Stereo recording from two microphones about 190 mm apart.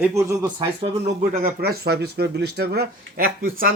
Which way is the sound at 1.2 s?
50° right (ahead or behind).